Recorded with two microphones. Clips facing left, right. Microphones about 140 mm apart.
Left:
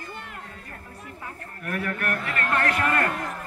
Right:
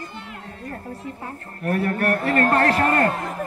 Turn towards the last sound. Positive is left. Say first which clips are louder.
# right 5 dB
turn(degrees=-25)  # may be behind; listen again after turning